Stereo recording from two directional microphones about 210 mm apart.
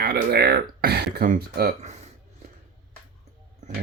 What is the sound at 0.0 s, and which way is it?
Speech, 50° right (ahead or behind).